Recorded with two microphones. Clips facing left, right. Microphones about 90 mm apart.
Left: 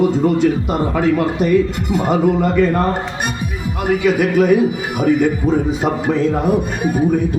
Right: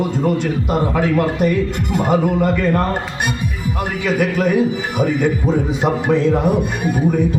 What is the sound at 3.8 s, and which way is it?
A man's voice, 5° left (ahead or behind).